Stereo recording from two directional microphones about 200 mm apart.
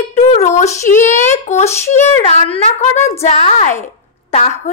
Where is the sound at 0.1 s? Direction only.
35° left (ahead or behind).